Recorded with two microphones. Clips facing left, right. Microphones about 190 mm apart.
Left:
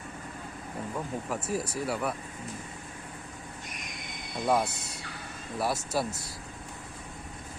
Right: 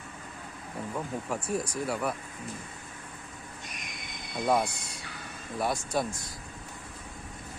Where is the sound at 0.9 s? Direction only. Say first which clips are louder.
Right 1 dB; centre (ahead or behind).